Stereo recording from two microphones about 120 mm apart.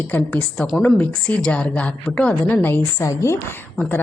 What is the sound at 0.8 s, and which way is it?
Speech, 15° left (ahead or behind).